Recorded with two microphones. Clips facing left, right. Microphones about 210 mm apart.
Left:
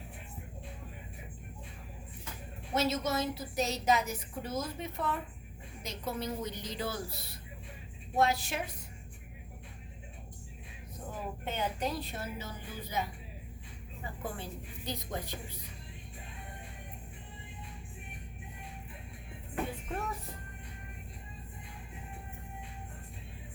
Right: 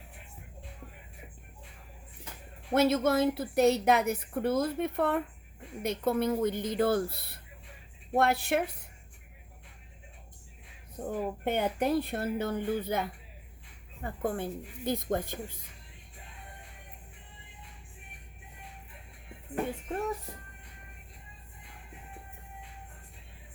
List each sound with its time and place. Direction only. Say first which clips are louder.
2.7 s a woman's voice: right 7 dB; 55° right (ahead or behind)
11.1 s a woman's voice: right 9 dB; 55° right (ahead or behind)